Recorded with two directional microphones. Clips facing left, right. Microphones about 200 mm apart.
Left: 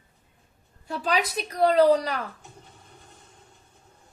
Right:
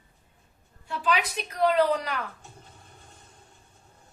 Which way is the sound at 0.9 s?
40° left (ahead or behind).